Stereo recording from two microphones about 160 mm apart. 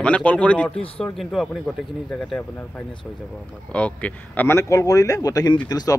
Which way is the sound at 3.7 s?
10° left (ahead or behind).